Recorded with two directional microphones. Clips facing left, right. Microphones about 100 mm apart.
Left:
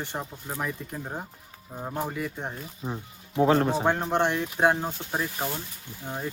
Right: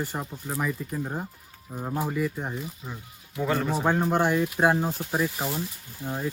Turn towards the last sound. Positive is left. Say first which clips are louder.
# right 3 dB
turn(degrees=0)  # may be behind; listen again after turning